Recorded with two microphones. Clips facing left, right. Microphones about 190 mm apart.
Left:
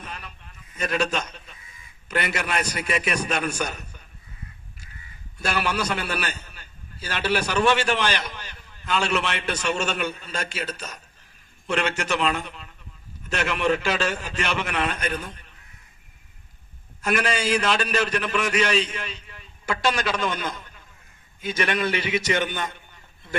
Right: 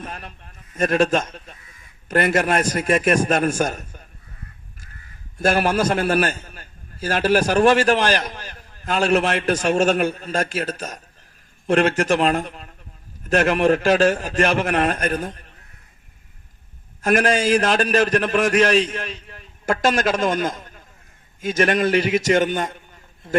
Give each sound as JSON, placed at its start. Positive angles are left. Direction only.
{"t": 0.0, "sound": "a sound", "side_deg": -45}
{"t": 2.0, "sound": "a man's voice", "side_deg": -45}
{"t": 5.4, "sound": "a man's voice", "side_deg": -45}
{"t": 17.0, "sound": "a man's voice", "side_deg": -45}